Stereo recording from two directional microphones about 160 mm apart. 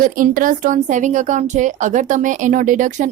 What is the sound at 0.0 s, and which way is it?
Speech, 55° right (ahead or behind).